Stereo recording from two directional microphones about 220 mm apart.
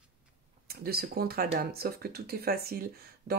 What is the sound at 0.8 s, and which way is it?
Speech, 45° right (ahead or behind).